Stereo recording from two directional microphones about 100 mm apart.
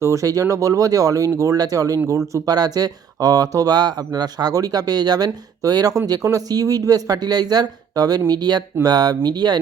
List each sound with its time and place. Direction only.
0.0 s speech: 35° right (ahead or behind)